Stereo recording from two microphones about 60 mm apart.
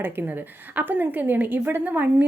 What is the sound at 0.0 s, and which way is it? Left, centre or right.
A woman's voice, right.